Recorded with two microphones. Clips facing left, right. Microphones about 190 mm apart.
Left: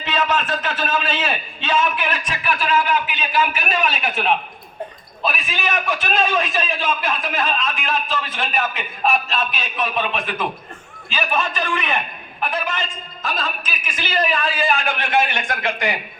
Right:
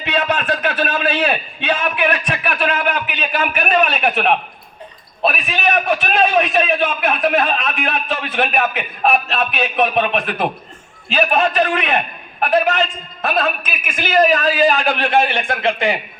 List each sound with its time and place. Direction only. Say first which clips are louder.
0.0 s a man's voice: right 2 dB; 60° right (ahead or behind); by 16.0 s 30° right (ahead or behind)